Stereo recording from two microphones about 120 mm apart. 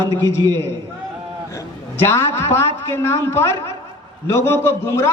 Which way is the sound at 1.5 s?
20° left (ahead or behind).